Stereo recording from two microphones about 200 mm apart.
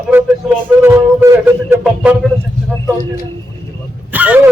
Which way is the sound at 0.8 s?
15° right (ahead or behind).